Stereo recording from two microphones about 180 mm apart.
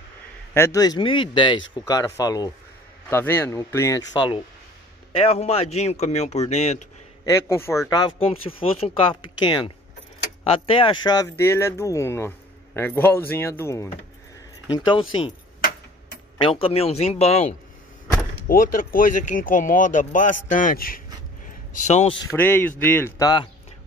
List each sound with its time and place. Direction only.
0.6 s speech: 20° left (ahead or behind); by 6.9 s 40° left (ahead or behind)
7.2 s speech: 15° left (ahead or behind)
14.9 s speech: 30° left (ahead or behind)
16.3 s speech: 30° left (ahead or behind)
18.5 s speech: 50° left (ahead or behind)
21.7 s speech: 40° left (ahead or behind)
22.3 s speech: 10° left (ahead or behind)